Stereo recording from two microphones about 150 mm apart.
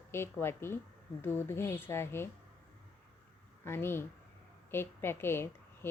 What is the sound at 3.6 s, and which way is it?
A woman's voice, 15° left (ahead or behind).